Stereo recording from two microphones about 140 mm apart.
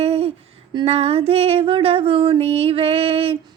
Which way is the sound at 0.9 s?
45° right (ahead or behind).